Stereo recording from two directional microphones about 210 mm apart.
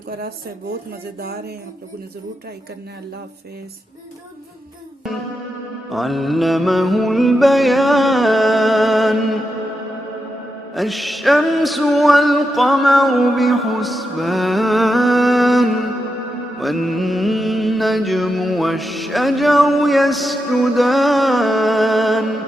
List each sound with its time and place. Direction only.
1.2 s speech: 50° right (ahead or behind)
5.9 s music: centre (ahead or behind)
10.8 s music: centre (ahead or behind)
16.6 s mantra: centre (ahead or behind)